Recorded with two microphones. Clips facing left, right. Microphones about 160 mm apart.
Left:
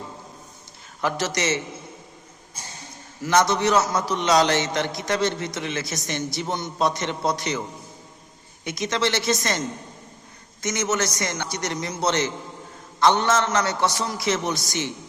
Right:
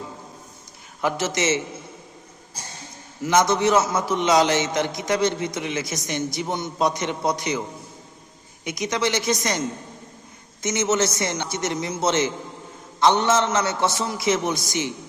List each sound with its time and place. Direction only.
1.0 s a man's voice: 20° right (ahead or behind)
3.2 s a man's voice: 20° right (ahead or behind)
8.6 s a woman's voice: 20° right (ahead or behind)